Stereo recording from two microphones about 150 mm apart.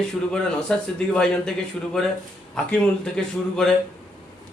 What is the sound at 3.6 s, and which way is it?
Speech, 5° left (ahead or behind).